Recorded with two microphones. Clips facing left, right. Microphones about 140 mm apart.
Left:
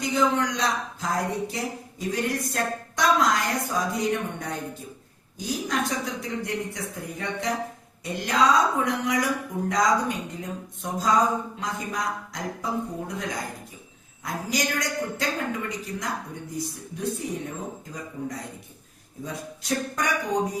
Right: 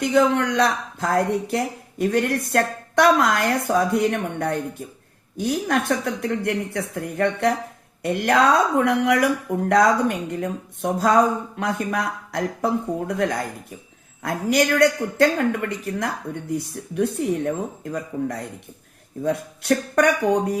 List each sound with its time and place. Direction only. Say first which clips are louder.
0.0 s speech: right 5 dB; 60° right (ahead or behind)